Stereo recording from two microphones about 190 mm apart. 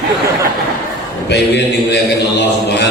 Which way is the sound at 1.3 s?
65° left (ahead or behind).